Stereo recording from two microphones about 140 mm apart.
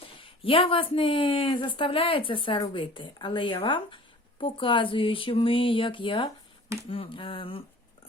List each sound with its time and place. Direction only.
0.0 s speech: 40° left (ahead or behind)